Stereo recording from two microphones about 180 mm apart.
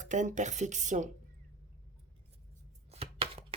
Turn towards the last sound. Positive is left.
turn(degrees=-30)  # may be behind; listen again after turning